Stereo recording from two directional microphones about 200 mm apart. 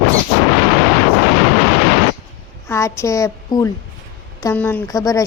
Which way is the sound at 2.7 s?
15° left (ahead or behind).